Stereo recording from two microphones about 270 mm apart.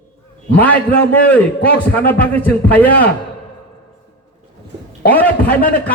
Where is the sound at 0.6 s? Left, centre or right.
Centre.